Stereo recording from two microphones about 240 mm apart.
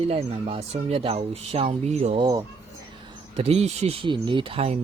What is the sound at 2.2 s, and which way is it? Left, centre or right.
Speech, centre.